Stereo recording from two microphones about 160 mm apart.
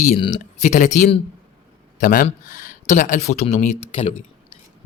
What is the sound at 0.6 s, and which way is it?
Speech, 50° left (ahead or behind).